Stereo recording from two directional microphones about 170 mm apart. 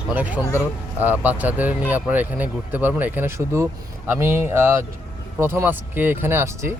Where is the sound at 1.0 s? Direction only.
10° right (ahead or behind).